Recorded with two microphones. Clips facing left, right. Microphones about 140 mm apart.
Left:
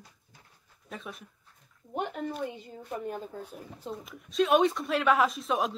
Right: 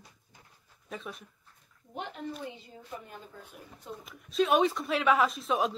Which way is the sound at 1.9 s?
50° left (ahead or behind).